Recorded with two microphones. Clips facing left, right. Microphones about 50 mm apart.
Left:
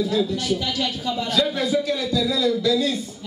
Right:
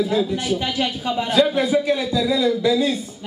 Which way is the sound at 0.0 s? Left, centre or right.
Right.